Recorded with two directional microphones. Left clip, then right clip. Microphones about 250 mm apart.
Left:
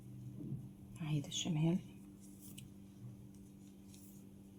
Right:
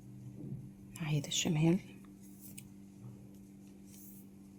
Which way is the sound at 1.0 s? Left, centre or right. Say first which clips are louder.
Right 6 dB; right.